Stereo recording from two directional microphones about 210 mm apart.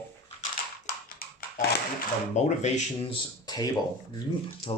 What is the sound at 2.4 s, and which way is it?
Speech, 35° left (ahead or behind).